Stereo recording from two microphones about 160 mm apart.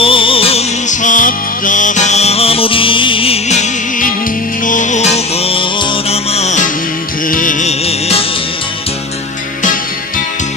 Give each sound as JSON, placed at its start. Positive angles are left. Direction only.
{"t": 0.0, "sound": "music", "side_deg": 35}
{"t": 7.2, "sound": "music", "side_deg": 55}
{"t": 7.8, "sound": "music", "side_deg": 40}